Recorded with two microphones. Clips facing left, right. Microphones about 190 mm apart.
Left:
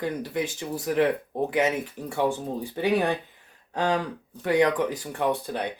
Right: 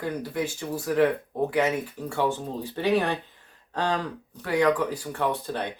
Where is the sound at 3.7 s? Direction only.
15° left (ahead or behind).